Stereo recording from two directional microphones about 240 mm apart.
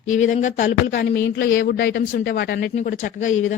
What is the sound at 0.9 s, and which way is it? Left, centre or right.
A man's voice, left.